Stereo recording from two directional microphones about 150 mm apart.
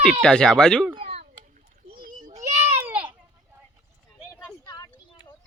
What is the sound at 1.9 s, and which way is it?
Children playing, 70° right (ahead or behind).